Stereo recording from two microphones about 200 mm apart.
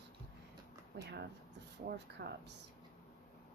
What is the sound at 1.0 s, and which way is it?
Speech, 60° right (ahead or behind).